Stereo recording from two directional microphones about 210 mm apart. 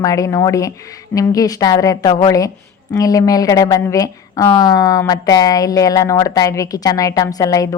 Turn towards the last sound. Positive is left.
turn(degrees=15)  # may be behind; listen again after turning